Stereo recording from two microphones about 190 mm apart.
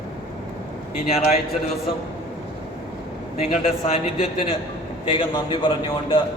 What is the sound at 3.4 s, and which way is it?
A man's voice, 30° left (ahead or behind).